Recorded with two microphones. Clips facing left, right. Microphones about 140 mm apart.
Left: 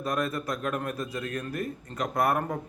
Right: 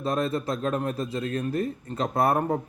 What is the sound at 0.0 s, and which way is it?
A man's voice, 25° right (ahead or behind).